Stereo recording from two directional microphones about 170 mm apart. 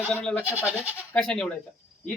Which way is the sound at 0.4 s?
10° right (ahead or behind).